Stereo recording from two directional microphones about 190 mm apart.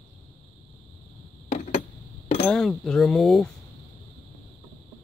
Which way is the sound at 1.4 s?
40° left (ahead or behind).